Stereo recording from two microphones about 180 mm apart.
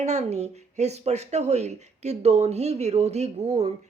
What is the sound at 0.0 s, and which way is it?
Speech, 40° right (ahead or behind).